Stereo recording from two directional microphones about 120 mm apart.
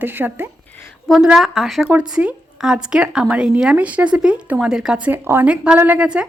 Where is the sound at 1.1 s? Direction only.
5° right (ahead or behind).